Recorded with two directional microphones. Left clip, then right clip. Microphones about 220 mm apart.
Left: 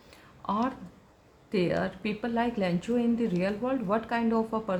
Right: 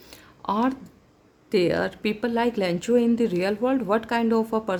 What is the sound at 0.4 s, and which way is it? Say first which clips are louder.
Speech: right 5 dB; 50° right (ahead or behind).